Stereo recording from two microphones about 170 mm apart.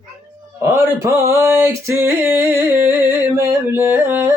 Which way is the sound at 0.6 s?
15° right (ahead or behind).